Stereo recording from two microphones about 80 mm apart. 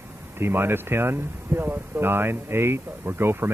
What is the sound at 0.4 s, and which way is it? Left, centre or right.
Speech, right.